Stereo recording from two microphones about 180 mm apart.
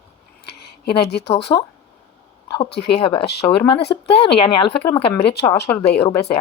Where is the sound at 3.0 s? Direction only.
30° left (ahead or behind).